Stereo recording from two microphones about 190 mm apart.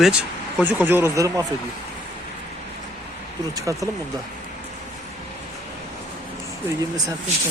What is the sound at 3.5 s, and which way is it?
Speech, 15° right (ahead or behind).